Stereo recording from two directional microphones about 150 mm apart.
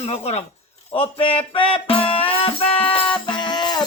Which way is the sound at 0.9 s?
35° left (ahead or behind).